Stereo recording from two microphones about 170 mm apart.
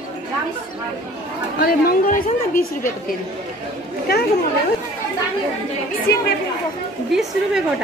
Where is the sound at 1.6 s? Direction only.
60° left (ahead or behind).